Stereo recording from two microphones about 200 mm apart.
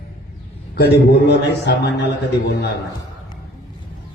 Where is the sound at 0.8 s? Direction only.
55° left (ahead or behind).